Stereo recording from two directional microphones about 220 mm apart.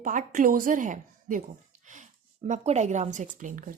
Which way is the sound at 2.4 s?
30° right (ahead or behind).